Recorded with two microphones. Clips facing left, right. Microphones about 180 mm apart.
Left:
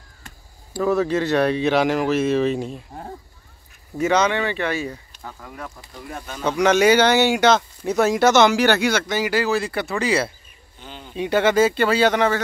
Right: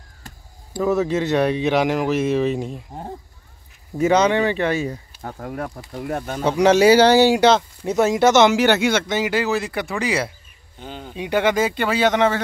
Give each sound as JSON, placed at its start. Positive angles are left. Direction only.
{"t": 0.7, "sound": "speech", "side_deg": -20}
{"t": 4.0, "sound": "speech", "side_deg": -30}
{"t": 5.2, "sound": "speech", "side_deg": -50}
{"t": 6.4, "sound": "speech", "side_deg": -30}
{"t": 10.8, "sound": "speech", "side_deg": -45}
{"t": 11.1, "sound": "speech", "side_deg": -15}